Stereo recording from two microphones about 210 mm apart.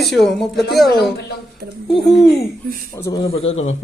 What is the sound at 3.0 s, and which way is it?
Speech, 15° left (ahead or behind).